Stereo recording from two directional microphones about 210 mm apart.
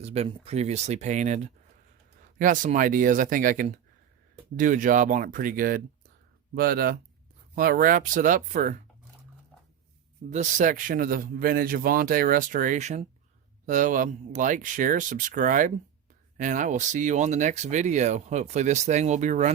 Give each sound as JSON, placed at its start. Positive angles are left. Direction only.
{"t": 0.0, "sound": "speech", "side_deg": -30}
{"t": 10.2, "sound": "speech", "side_deg": -35}